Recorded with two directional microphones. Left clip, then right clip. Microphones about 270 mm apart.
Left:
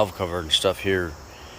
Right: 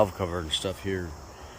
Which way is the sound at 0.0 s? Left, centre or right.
Centre.